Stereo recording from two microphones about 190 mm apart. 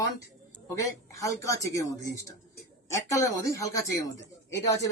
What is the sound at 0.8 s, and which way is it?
A man's voice, 15° left (ahead or behind).